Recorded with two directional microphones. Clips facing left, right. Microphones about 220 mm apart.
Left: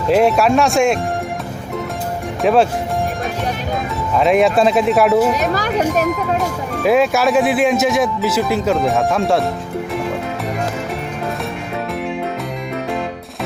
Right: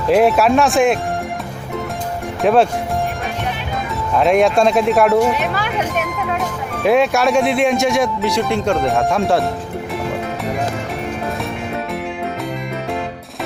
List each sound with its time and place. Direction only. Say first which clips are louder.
0.1 s speech: right 1 dB; centre (ahead or behind)
2.4 s speech: even; centre (ahead or behind)
4.1 s speech: even; centre (ahead or behind)
5.4 s speech: left 3 dB; 40° left (ahead or behind)
5.8 s speech: left 5 dB; centre (ahead or behind)